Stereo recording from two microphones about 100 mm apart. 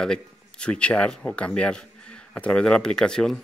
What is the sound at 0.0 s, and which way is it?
A man's voice, 10° left (ahead or behind).